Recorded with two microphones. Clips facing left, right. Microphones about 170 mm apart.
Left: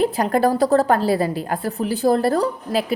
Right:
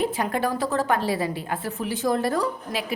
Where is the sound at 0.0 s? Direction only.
35° left (ahead or behind).